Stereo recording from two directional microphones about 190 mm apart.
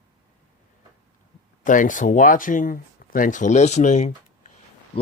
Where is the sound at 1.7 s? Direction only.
45° left (ahead or behind).